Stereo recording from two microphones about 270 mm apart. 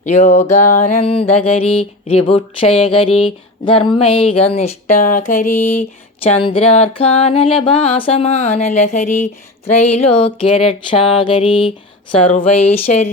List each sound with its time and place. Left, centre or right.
0.0 s music: left
12.5 s speech: left